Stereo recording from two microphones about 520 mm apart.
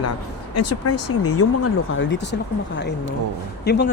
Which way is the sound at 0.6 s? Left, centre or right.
Left.